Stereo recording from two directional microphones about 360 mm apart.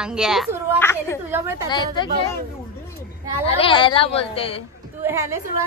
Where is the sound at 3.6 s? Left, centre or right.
Centre.